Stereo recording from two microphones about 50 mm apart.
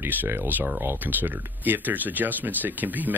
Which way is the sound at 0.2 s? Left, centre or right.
Right.